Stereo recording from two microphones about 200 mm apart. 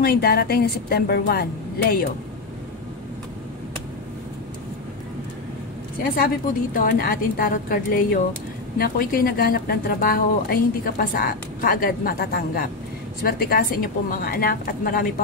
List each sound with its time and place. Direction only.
0.0 s speech: 50° left (ahead or behind)
6.0 s speech: 45° left (ahead or behind)